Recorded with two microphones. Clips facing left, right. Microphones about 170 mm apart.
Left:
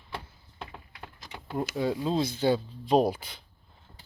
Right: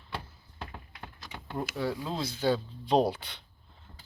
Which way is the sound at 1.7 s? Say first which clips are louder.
Left 6 dB; 20° left (ahead or behind).